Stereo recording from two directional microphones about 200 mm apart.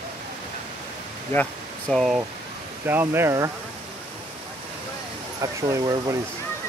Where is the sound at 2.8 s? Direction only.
10° right (ahead or behind).